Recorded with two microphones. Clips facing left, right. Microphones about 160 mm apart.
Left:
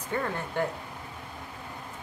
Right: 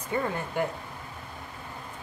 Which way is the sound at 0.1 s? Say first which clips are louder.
Right 2 dB; 10° right (ahead or behind).